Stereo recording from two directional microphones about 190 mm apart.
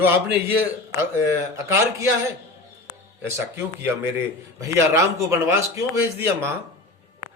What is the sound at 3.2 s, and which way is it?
A man's voice, 10° right (ahead or behind).